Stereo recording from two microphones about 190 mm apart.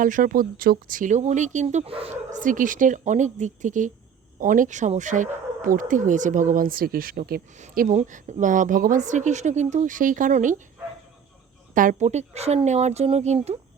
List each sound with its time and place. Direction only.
0.0 s speech: 45° right (ahead or behind)
2.4 s speech: 45° right (ahead or behind)
11.7 s speech: 45° right (ahead or behind)